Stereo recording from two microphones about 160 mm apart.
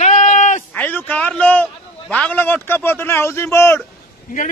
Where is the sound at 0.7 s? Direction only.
10° left (ahead or behind).